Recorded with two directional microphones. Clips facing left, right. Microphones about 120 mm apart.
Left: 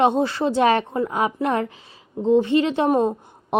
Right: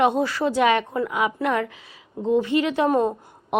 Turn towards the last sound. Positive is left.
turn(degrees=25)  # may be behind; listen again after turning